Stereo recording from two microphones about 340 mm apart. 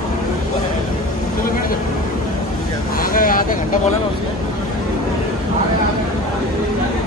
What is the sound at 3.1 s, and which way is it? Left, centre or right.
Vehicle, left.